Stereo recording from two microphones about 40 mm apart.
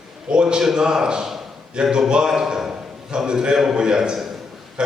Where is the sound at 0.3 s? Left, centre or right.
Right.